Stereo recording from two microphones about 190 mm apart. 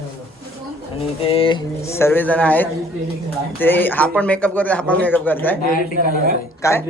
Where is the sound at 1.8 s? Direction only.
15° left (ahead or behind).